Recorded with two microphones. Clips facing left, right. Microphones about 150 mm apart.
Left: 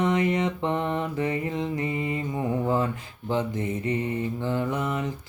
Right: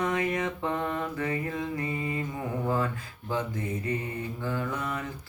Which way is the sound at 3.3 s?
25° left (ahead or behind).